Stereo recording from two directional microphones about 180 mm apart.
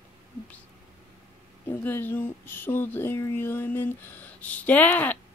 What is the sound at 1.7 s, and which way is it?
Speech, 10° left (ahead or behind).